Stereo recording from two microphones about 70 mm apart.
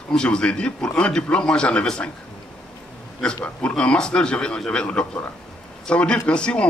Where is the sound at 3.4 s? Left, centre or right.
Centre.